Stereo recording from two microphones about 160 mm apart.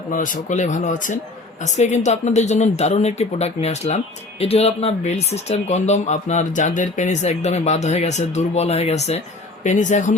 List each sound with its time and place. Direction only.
0.1 s speech: 55° left (ahead or behind)